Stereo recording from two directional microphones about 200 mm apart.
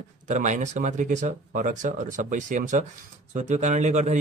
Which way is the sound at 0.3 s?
40° right (ahead or behind).